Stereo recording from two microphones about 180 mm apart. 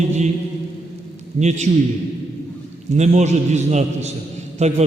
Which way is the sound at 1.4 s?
40° right (ahead or behind).